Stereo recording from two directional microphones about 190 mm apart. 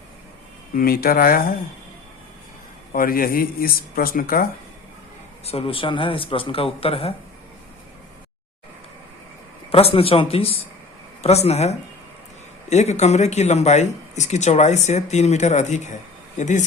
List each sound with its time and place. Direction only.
0.8 s speech: 50° left (ahead or behind)
2.9 s speech: 50° left (ahead or behind)
5.5 s speech: 30° left (ahead or behind)
9.7 s speech: 30° left (ahead or behind)